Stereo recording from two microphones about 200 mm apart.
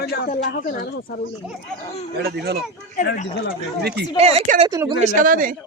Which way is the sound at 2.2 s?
50° right (ahead or behind).